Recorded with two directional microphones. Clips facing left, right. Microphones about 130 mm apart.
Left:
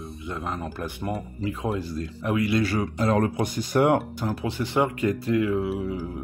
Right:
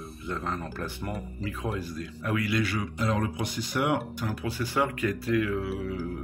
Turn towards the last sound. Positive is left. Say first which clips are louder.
# left 3 dB
turn(degrees=20)  # may be behind; listen again after turning